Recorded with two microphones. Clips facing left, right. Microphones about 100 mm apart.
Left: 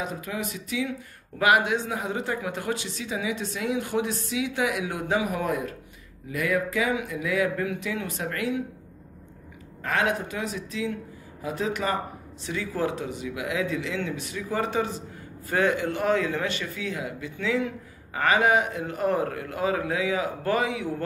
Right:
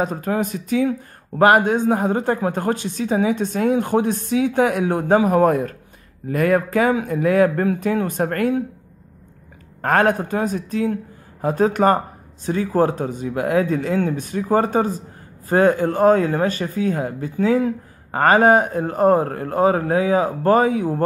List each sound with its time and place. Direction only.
0.0 s speech: 45° right (ahead or behind)
9.8 s speech: 50° right (ahead or behind)